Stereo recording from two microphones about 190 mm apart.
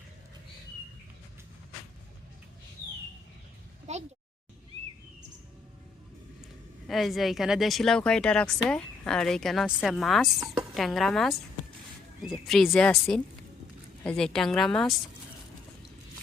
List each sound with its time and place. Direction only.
3.9 s a sound: 35° right (ahead or behind)
6.8 s speech: centre (ahead or behind)
10.4 s speech: 25° right (ahead or behind)
10.8 s speech: centre (ahead or behind)